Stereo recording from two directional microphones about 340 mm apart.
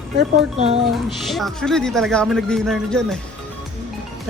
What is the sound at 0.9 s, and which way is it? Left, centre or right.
Speech, centre.